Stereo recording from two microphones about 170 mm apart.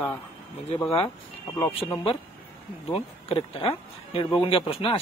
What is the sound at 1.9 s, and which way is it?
Speech, 30° left (ahead or behind).